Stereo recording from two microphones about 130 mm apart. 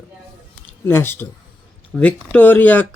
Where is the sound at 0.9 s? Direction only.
20° left (ahead or behind).